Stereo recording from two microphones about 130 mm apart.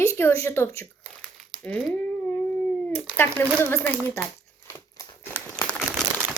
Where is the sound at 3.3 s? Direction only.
20° right (ahead or behind).